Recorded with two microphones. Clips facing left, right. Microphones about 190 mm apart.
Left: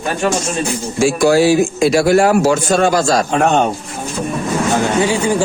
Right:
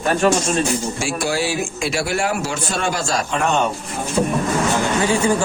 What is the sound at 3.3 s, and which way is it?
Speech, 60° left (ahead or behind).